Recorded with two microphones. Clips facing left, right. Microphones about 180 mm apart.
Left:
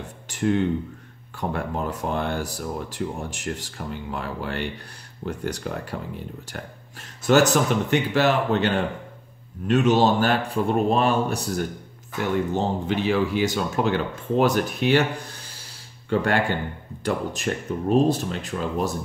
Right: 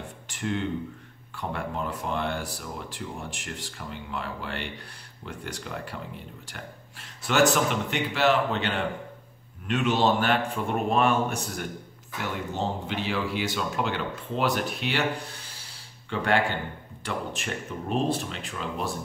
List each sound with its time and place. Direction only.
0.3 s speech: 45° left (ahead or behind)
12.8 s speech: 45° left (ahead or behind)
16.1 s speech: 45° left (ahead or behind)